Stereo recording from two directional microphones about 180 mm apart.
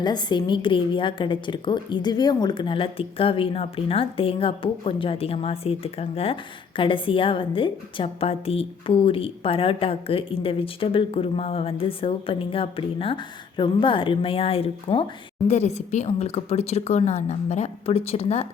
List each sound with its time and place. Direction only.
0.0 s a woman's voice: 25° left (ahead or behind)